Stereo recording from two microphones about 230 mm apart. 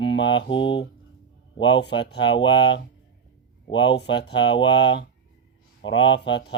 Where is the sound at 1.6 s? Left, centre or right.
Left.